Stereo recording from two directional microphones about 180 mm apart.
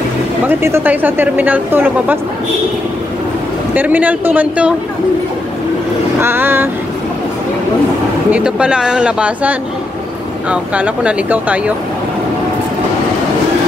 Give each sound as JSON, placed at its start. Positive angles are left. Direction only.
{"t": 0.5, "sound": "speech", "side_deg": -15}
{"t": 3.7, "sound": "speech", "side_deg": -10}
{"t": 6.2, "sound": "speech", "side_deg": -10}
{"t": 8.3, "sound": "speech", "side_deg": -5}